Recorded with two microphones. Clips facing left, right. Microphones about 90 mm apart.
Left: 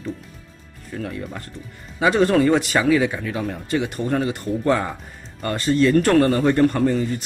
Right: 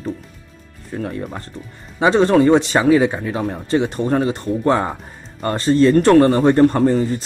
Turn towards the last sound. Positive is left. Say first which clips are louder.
# right 4 dB
turn(degrees=-35)  # may be behind; listen again after turning